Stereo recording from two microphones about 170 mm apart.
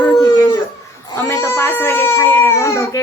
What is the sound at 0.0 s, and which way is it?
Dog, 25° left (ahead or behind).